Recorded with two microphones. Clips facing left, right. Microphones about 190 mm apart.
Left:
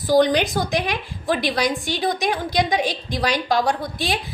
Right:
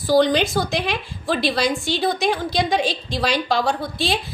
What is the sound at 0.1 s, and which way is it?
A woman's voice, 15° left (ahead or behind).